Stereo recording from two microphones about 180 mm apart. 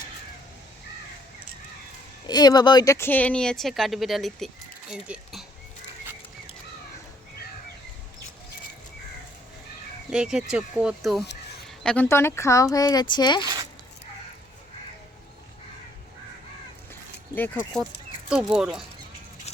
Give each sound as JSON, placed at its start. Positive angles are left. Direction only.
{"t": 2.2, "sound": "speech", "side_deg": 20}
{"t": 10.1, "sound": "speech", "side_deg": -5}
{"t": 16.9, "sound": "a sound", "side_deg": 10}
{"t": 18.3, "sound": "speech", "side_deg": -5}